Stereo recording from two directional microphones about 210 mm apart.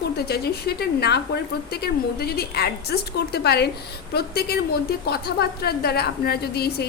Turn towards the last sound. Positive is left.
turn(degrees=50)  # may be behind; listen again after turning